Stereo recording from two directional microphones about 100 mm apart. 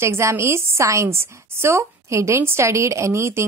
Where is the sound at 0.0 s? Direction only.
30° right (ahead or behind).